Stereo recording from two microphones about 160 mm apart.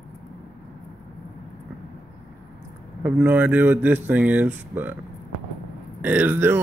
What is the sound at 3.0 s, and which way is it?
Speech, 10° right (ahead or behind).